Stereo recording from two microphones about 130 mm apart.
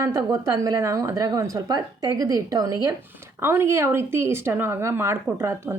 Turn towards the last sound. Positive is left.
turn(degrees=-20)  # may be behind; listen again after turning